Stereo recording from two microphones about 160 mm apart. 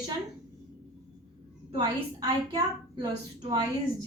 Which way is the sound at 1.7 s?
25° right (ahead or behind).